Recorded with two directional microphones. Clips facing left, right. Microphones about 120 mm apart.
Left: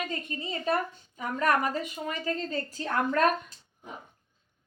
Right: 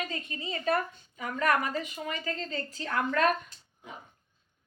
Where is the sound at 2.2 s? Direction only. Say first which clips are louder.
Left 4 dB; 35° left (ahead or behind).